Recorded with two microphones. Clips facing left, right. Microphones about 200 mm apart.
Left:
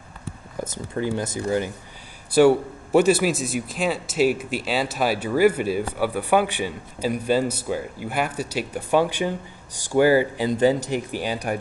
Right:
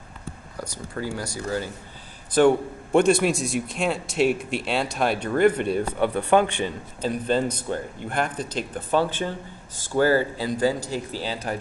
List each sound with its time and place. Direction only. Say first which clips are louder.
0.6 s speech: left 5 dB; 20° left (ahead or behind)
2.3 s a man's voice: left 2 dB; 5° left (ahead or behind)